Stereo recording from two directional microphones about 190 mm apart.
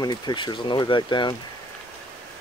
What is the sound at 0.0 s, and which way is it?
Speech, 20° left (ahead or behind).